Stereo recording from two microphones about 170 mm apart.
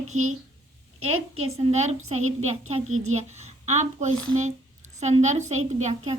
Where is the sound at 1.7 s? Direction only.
40° right (ahead or behind).